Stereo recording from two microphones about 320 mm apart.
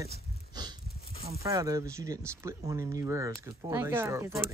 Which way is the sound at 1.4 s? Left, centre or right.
Centre.